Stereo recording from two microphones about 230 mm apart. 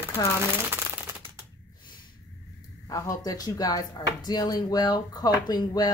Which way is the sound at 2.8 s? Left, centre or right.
Centre.